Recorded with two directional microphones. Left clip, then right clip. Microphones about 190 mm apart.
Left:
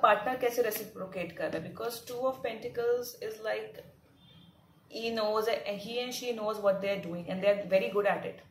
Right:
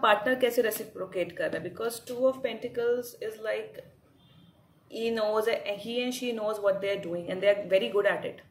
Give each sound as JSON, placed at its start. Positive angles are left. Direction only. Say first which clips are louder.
{"t": 0.0, "sound": "speech", "louder": "right 2 dB", "side_deg": -45}
{"t": 4.9, "sound": "speech", "louder": "right 3 dB", "side_deg": -35}